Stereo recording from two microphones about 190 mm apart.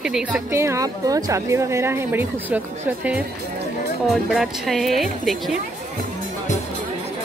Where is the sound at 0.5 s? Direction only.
15° right (ahead or behind).